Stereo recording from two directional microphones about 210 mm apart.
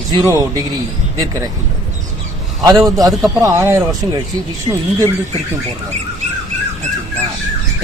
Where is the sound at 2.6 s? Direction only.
15° right (ahead or behind).